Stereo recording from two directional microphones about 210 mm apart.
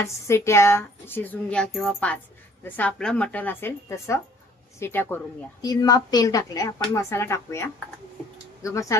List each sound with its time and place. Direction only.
0.0 s speech: 15° left (ahead or behind)